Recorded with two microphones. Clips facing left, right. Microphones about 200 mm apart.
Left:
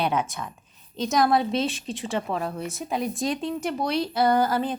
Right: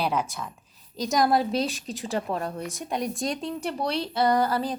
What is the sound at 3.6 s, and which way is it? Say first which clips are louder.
Speech: left 2 dB; 30° right (ahead or behind).